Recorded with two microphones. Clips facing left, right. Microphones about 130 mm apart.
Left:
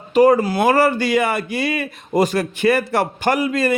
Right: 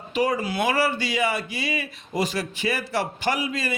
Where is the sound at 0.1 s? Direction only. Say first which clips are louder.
Left 11 dB; 45° left (ahead or behind).